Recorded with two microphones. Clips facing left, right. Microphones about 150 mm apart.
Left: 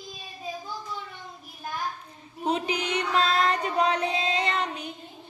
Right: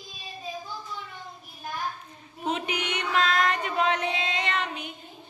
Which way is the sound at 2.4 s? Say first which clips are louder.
Left 2 dB; 35° left (ahead or behind).